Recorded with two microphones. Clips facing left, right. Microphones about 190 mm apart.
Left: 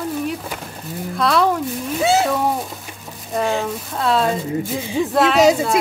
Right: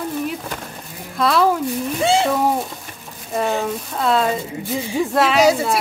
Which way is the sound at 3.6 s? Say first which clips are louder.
Right 1 dB; centre (ahead or behind).